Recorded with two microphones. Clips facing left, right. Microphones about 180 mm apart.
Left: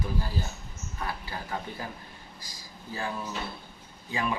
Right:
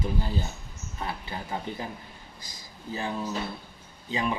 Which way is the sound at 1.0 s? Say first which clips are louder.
Right 1 dB; 20° right (ahead or behind).